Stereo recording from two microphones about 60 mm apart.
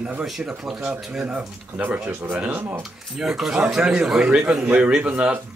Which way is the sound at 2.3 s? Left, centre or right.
Right.